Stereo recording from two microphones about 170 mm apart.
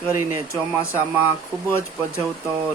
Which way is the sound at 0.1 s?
15° right (ahead or behind).